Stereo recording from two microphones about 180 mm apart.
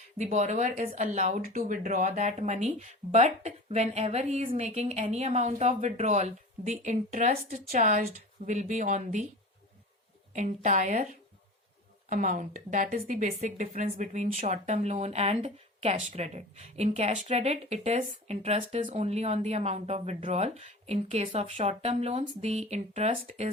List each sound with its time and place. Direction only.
0.2 s speech: 40° right (ahead or behind)
10.3 s a woman's voice: 45° right (ahead or behind)